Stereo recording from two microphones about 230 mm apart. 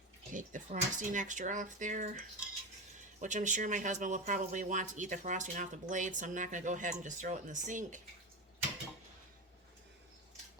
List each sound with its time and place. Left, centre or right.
0.3 s speech: right
3.2 s speech: right